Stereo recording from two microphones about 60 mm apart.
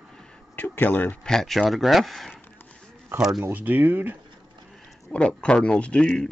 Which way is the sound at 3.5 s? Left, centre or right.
Right.